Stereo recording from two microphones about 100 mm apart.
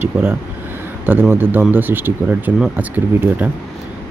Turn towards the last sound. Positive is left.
turn(degrees=-15)  # may be behind; listen again after turning